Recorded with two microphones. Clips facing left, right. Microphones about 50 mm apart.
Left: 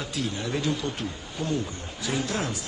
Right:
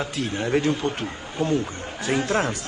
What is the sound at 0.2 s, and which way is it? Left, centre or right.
Speech, right.